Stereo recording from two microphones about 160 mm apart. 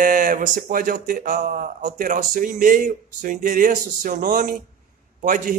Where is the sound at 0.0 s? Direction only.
55° right (ahead or behind).